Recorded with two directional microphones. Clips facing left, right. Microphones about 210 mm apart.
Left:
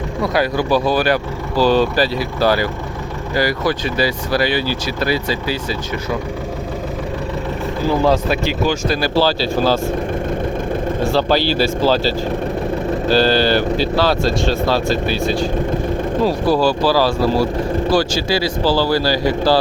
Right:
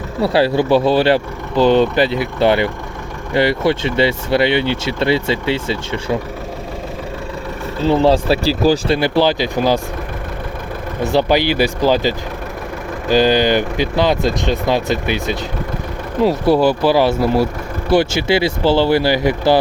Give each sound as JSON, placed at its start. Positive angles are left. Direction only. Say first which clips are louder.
{"t": 0.2, "sound": "speech", "louder": "right 4 dB", "side_deg": -30}
{"t": 7.8, "sound": "speech", "louder": "right 3 dB", "side_deg": -25}
{"t": 9.0, "sound": "speech", "louder": "right 2 dB", "side_deg": -20}
{"t": 11.0, "sound": "speech", "louder": "right 3 dB", "side_deg": -20}